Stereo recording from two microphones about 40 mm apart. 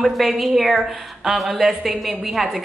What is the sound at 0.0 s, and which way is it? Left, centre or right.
A woman's voice, centre.